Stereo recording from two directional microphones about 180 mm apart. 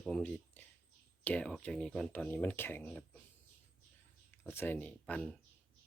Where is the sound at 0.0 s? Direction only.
5° left (ahead or behind).